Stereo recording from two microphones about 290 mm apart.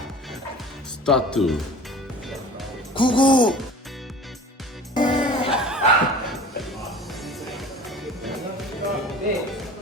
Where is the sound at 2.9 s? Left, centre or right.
Centre.